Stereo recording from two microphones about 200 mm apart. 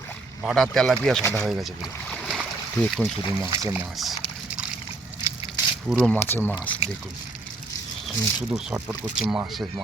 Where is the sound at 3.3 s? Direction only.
10° right (ahead or behind).